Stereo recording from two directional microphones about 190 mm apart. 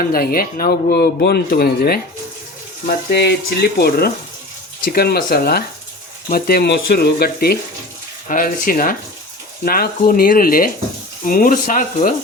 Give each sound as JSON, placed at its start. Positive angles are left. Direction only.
{"t": 0.1, "sound": "speech", "side_deg": 50}